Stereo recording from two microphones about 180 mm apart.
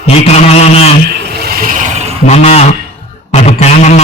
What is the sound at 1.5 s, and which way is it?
Vehicle, 50° right (ahead or behind).